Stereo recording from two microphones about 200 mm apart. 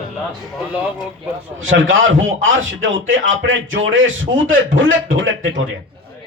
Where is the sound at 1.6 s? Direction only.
70° right (ahead or behind).